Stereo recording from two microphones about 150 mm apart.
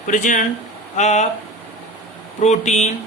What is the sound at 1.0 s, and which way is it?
Speech, 50° left (ahead or behind).